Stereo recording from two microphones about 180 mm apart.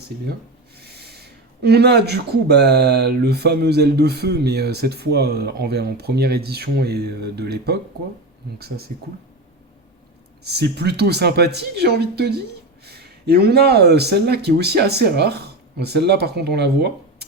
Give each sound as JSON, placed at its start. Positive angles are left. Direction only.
{"t": 0.8, "sound": "speech", "side_deg": -65}
{"t": 10.4, "sound": "speech", "side_deg": -65}